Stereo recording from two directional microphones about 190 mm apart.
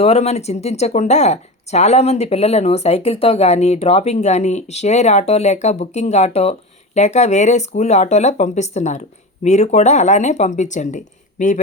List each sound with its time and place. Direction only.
0.0 s speech: 35° left (ahead or behind)